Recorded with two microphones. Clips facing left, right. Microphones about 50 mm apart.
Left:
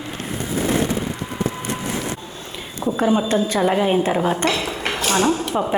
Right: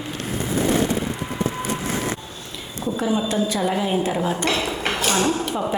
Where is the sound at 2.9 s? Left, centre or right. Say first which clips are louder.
Left 4 dB; left.